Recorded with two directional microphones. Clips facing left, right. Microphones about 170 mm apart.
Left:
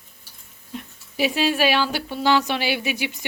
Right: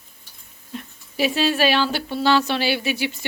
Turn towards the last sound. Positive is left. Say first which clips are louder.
# right 2 dB
turn(degrees=15)  # may be behind; listen again after turning